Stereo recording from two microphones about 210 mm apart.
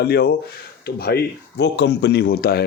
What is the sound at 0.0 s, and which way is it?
Speech, 50° left (ahead or behind).